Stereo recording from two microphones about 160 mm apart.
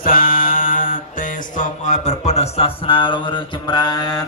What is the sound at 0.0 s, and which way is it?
Music, 60° left (ahead or behind).